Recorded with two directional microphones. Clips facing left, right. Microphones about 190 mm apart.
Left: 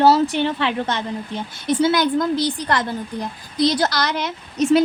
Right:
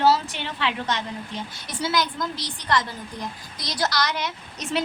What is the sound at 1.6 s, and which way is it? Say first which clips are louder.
A woman's voice: left 9 dB; 60° left (ahead or behind).